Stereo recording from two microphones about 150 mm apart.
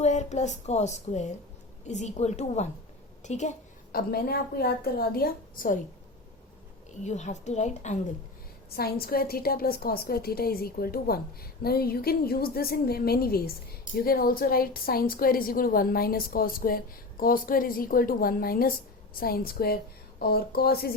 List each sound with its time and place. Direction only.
0.0 s speech: 50° left (ahead or behind)
3.9 s a woman's voice: 80° left; by 5.8 s 65° left (ahead or behind)
7.0 s speech: 50° left (ahead or behind)
8.7 s a woman's voice: 90° left